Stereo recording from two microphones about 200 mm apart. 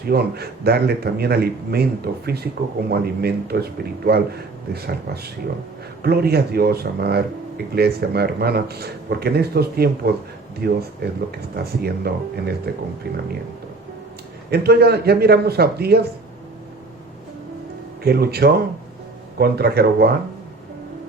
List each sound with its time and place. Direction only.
0.0 s a man's voice: 50° right (ahead or behind)
14.5 s a man's voice: 55° right (ahead or behind)
18.0 s a man's voice: 50° right (ahead or behind)